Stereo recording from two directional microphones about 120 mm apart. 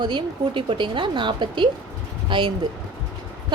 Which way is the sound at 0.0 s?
40° right (ahead or behind).